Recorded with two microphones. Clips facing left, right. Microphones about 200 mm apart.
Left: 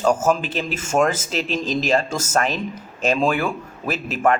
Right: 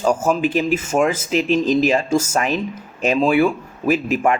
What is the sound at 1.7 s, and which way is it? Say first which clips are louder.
Speech: right 2 dB; 10° right (ahead or behind).